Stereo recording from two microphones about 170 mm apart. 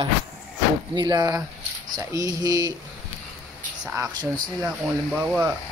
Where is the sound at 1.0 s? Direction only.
25° right (ahead or behind).